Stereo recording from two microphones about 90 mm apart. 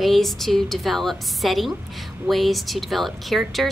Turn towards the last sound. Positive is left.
turn(degrees=0)  # may be behind; listen again after turning